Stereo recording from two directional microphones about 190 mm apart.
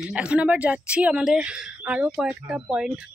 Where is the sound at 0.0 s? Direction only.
5° right (ahead or behind).